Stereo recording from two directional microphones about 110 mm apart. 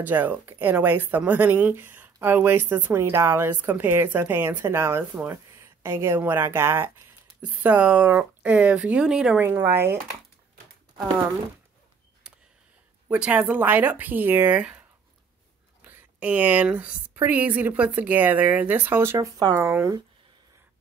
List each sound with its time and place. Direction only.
0.0 s a woman's voice: 15° right (ahead or behind)
9.4 s a woman's voice: 20° right (ahead or behind)
13.1 s speech: 15° right (ahead or behind); by 19.7 s 30° right (ahead or behind)